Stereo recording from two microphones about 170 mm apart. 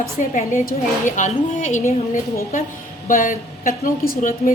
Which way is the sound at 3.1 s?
50° left (ahead or behind).